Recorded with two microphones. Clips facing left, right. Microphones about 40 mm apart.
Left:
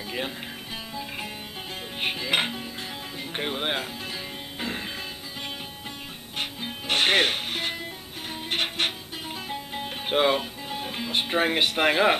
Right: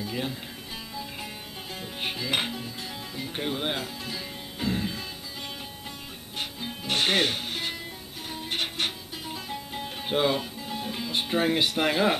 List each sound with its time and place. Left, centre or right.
0.0 s music: left
2.0 s speech: left
3.2 s music: left
6.3 s music: left